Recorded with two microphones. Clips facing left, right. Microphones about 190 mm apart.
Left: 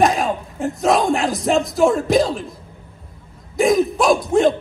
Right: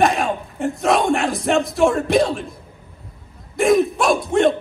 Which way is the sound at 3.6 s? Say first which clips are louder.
Even; centre (ahead or behind).